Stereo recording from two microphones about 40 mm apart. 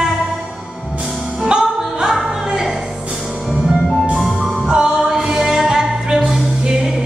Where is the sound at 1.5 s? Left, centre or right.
Right.